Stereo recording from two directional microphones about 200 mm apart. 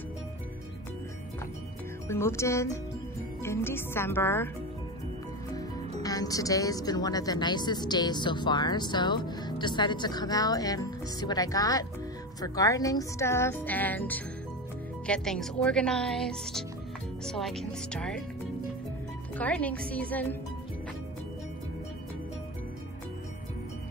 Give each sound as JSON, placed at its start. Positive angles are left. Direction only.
{"t": 2.0, "sound": "speech", "side_deg": 15}
{"t": 6.0, "sound": "speech", "side_deg": 15}
{"t": 19.3, "sound": "speech", "side_deg": 5}